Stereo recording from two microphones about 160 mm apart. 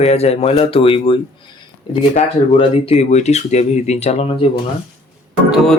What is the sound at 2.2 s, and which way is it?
Speech, 35° left (ahead or behind).